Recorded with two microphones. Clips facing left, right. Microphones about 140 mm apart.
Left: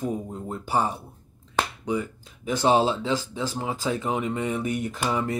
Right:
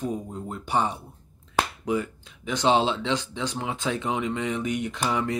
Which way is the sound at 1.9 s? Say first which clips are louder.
Right 1 dB; centre (ahead or behind).